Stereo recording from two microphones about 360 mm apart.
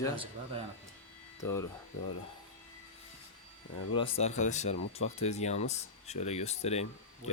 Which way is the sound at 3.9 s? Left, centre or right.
Centre.